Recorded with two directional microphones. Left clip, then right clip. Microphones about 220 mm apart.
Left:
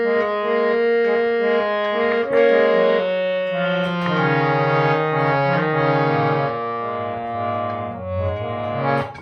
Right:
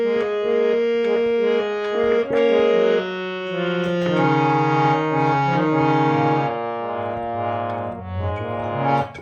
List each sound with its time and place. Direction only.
0.8 s music: 15° right (ahead or behind)
4.7 s music: 20° right (ahead or behind)